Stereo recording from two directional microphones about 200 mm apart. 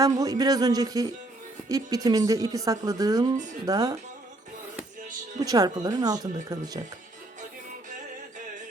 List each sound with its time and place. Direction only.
0.0 s speech: 20° right (ahead or behind)
5.4 s speech: 20° right (ahead or behind)